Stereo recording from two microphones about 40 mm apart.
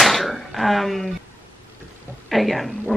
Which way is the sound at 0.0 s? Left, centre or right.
Centre.